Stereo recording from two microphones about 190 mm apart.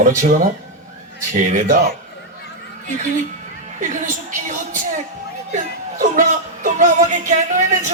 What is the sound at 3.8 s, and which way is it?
A woman's voice, 40° right (ahead or behind).